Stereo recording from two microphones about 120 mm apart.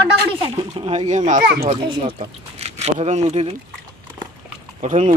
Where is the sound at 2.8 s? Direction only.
65° right (ahead or behind).